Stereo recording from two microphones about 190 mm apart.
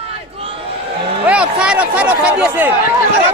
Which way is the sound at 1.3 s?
5° right (ahead or behind).